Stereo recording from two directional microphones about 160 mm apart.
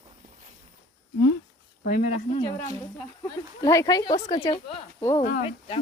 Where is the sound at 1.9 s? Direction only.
50° left (ahead or behind).